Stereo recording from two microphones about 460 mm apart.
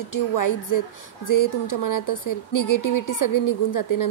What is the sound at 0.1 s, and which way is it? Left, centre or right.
A woman's voice, left.